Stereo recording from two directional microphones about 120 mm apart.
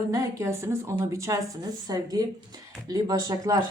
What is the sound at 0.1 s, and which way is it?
Speech, 25° right (ahead or behind).